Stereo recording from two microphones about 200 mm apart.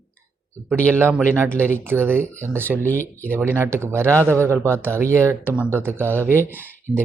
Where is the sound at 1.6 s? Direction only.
10° right (ahead or behind).